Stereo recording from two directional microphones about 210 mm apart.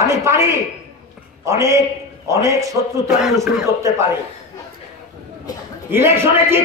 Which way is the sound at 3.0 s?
5° right (ahead or behind).